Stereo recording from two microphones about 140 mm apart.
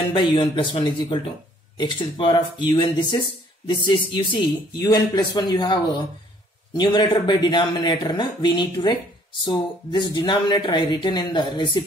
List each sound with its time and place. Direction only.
0.1 s speech: 35° left (ahead or behind)